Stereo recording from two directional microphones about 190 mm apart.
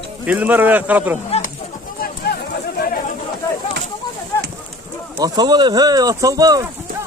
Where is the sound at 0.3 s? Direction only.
10° right (ahead or behind).